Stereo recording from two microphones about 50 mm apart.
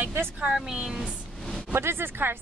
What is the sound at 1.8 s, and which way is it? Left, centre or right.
Speech, right.